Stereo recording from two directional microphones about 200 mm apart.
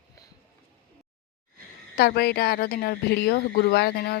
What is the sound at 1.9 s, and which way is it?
Speech, 55° left (ahead or behind).